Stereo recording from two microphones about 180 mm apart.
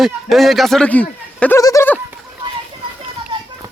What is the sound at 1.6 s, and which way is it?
Goat, 20° left (ahead or behind).